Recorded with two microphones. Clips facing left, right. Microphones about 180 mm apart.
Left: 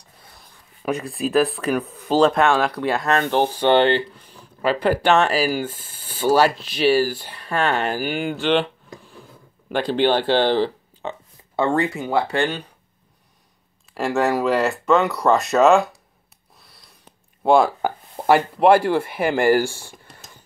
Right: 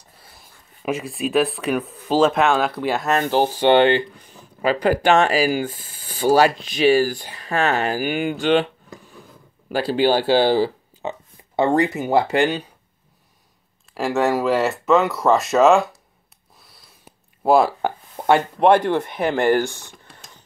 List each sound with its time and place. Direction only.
0.8 s speech: centre (ahead or behind)
4.1 s a sound: 45° right (ahead or behind)
4.6 s speech: 45° right (ahead or behind)
5.0 s speech: 10° right (ahead or behind)
5.8 s a sound: 45° left (ahead or behind)
6.2 s speech: 10° right (ahead or behind)
6.6 s speech: 50° right (ahead or behind)
7.6 s speech: 10° right (ahead or behind)
9.7 s speech: 5° right (ahead or behind)
13.9 s speech: centre (ahead or behind)